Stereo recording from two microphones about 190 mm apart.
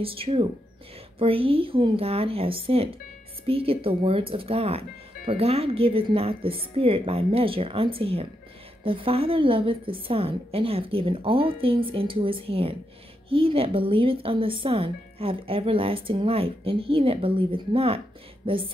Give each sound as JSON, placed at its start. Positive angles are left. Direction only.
{"t": 0.0, "sound": "speech", "side_deg": -30}